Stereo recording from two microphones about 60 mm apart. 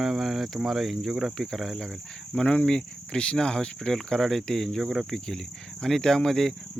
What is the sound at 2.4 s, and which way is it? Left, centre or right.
Speech, centre.